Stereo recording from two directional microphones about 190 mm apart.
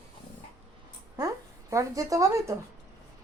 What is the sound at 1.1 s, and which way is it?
Speech, 15° right (ahead or behind).